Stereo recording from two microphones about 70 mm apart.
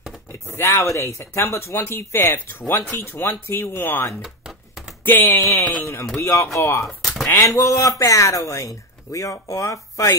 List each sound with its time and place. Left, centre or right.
0.3 s speech: left
4.2 s a sound: centre
5.0 s speech: left
5.4 s speech: left
6.9 s a sound: centre
7.4 s speech: left